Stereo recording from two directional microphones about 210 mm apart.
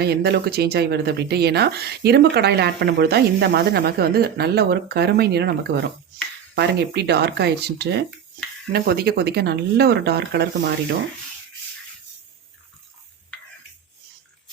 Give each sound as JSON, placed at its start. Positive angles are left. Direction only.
{"t": 0.0, "sound": "speech", "side_deg": -50}